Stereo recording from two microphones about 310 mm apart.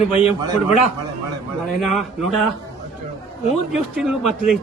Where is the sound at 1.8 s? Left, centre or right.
Centre.